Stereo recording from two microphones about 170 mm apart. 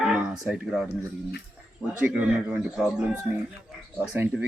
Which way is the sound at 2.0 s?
5° right (ahead or behind).